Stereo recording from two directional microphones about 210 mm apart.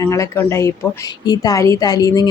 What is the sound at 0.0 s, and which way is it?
A woman's voice, 15° left (ahead or behind).